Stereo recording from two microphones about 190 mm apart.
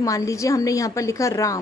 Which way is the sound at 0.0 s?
15° left (ahead or behind).